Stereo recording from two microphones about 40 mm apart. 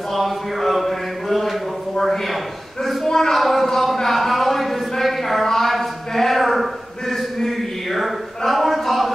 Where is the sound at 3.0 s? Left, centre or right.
Centre.